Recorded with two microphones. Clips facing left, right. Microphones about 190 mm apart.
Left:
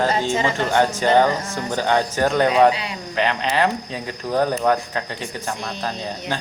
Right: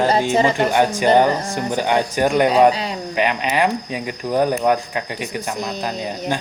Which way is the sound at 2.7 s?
40° right (ahead or behind).